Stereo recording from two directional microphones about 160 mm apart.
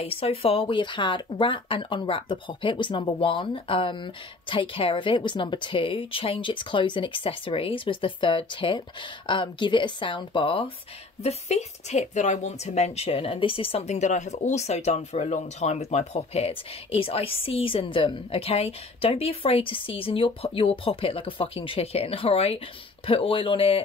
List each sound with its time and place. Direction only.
0.0 s a woman's voice: 35° left (ahead or behind)